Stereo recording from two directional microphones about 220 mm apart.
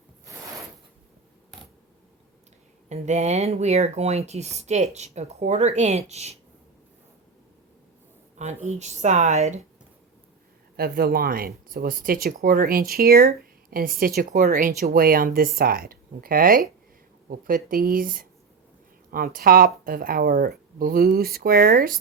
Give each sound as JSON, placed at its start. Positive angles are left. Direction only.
{"t": 2.9, "sound": "speech", "side_deg": -30}
{"t": 8.4, "sound": "speech", "side_deg": -30}
{"t": 10.8, "sound": "speech", "side_deg": -45}